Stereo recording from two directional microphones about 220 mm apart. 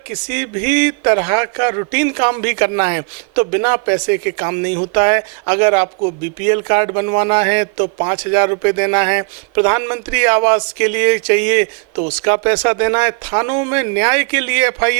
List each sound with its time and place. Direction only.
0.3 s a man's voice: 15° right (ahead or behind)